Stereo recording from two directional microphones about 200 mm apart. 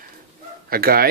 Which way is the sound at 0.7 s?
50° right (ahead or behind).